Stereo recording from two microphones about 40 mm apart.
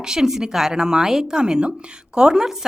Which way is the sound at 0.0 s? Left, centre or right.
Centre.